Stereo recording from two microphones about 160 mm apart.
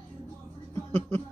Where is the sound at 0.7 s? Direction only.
15° left (ahead or behind).